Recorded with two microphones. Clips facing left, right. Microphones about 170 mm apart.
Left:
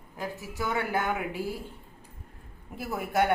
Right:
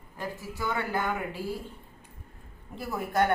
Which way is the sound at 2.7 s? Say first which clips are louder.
Even; 10° left (ahead or behind).